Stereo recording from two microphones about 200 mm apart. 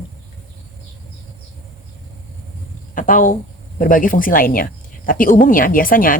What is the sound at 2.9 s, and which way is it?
A woman's voice, 40° left (ahead or behind).